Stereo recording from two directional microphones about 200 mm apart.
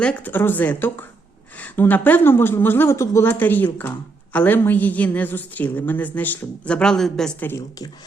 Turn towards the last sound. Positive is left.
turn(degrees=20)  # may be behind; listen again after turning